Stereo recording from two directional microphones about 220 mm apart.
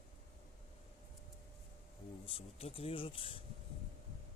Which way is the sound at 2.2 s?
25° left (ahead or behind).